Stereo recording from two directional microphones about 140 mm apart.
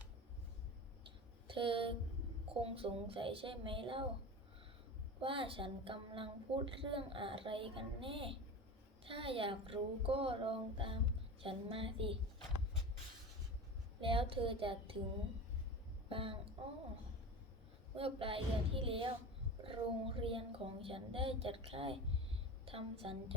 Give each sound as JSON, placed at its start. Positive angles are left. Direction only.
{"t": 1.5, "sound": "a woman's voice", "side_deg": -40}
{"t": 5.2, "sound": "a woman's voice", "side_deg": -40}
{"t": 14.0, "sound": "a woman's voice", "side_deg": -40}
{"t": 16.0, "sound": "speech", "side_deg": -40}
{"t": 17.9, "sound": "a woman's voice", "side_deg": -40}